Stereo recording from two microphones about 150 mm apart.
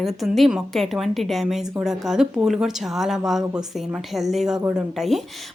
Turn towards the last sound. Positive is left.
turn(degrees=0)  # may be behind; listen again after turning